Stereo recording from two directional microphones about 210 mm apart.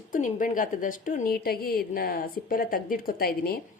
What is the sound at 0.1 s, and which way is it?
A woman's voice, 40° left (ahead or behind).